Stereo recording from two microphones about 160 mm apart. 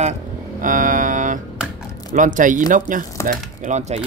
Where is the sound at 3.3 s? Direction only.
50° right (ahead or behind).